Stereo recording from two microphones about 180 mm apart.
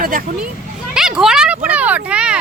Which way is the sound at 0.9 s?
5° right (ahead or behind).